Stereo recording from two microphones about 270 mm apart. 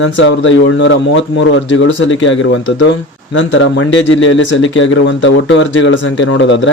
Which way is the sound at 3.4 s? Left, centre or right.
Left.